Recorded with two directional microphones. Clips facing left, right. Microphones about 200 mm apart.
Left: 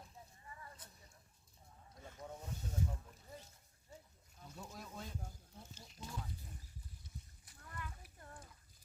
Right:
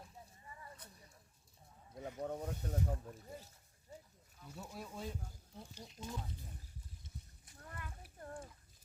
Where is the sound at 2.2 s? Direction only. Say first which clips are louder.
Right 9 dB; 60° right (ahead or behind).